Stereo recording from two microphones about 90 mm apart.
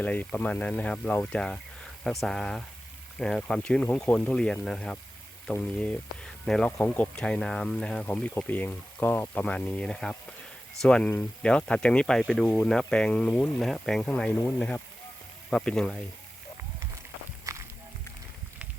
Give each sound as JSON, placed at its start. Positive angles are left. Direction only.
{"t": 0.0, "sound": "speech", "side_deg": 15}
{"t": 6.7, "sound": "speech", "side_deg": 20}
{"t": 14.0, "sound": "speech", "side_deg": 15}
{"t": 17.5, "sound": "music", "side_deg": -35}